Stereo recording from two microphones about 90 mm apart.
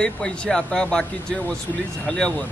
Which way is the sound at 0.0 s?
10° left (ahead or behind).